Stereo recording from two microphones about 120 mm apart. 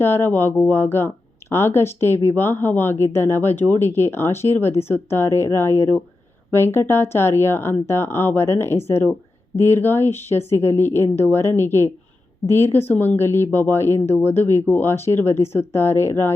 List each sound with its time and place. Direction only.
0.0 s speech: 20° left (ahead or behind)